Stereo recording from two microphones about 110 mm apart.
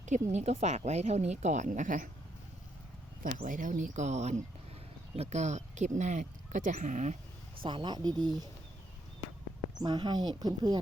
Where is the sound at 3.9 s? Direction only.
90° right.